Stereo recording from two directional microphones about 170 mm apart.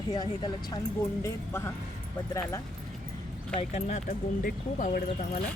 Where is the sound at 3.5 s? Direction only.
40° left (ahead or behind).